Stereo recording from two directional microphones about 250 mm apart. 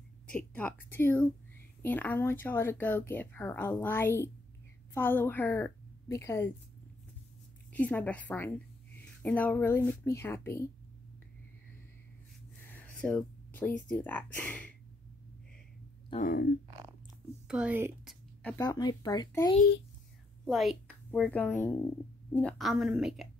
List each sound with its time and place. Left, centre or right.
0.3 s a woman's voice: centre
7.7 s a woman's voice: centre
12.6 s a sound: centre
13.8 s speech: centre
16.1 s speech: left
17.5 s a woman's voice: centre
18.4 s speech: centre
20.4 s a woman's voice: centre